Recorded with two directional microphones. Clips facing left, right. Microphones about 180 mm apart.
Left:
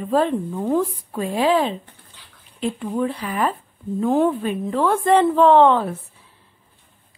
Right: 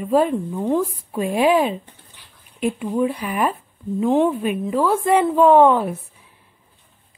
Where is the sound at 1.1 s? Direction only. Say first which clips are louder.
Right 3 dB; 15° right (ahead or behind).